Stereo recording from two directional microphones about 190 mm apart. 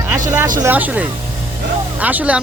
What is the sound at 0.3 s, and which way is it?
Speech, 15° right (ahead or behind).